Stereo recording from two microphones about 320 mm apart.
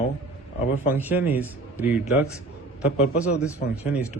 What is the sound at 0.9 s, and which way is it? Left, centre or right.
Speech, centre.